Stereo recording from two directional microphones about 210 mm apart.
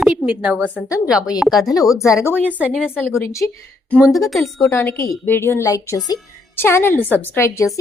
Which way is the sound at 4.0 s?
Centre (ahead or behind).